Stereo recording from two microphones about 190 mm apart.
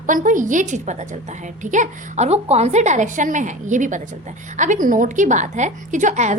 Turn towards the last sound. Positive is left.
turn(degrees=-40)  # may be behind; listen again after turning